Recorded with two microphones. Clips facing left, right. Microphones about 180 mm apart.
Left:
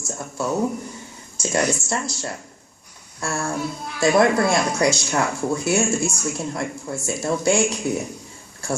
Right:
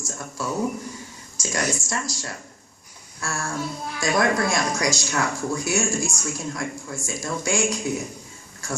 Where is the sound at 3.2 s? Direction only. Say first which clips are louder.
Left 4 dB; 25° left (ahead or behind).